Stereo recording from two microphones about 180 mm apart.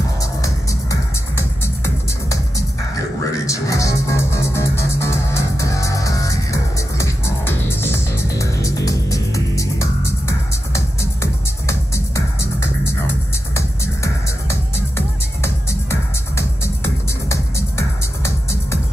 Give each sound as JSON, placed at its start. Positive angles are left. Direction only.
{"t": 3.4, "sound": "music", "side_deg": 15}